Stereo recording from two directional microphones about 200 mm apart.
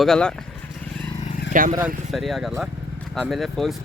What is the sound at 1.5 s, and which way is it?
Speech, 40° right (ahead or behind).